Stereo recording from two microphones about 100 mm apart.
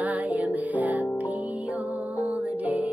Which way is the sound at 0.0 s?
15° right (ahead or behind).